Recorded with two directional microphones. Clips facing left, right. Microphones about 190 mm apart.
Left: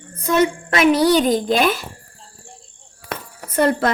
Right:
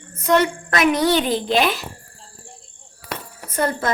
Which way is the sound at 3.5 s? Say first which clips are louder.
Left 5 dB; 65° left (ahead or behind).